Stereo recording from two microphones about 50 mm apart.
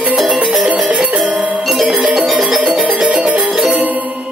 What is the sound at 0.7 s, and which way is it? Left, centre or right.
Music, right.